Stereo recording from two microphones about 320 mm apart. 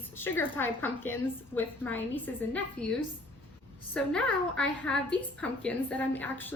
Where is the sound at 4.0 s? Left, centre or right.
Centre.